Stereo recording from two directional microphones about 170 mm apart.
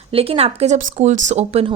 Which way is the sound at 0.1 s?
35° right (ahead or behind).